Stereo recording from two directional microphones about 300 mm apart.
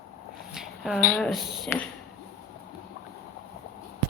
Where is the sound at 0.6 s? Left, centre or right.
Centre.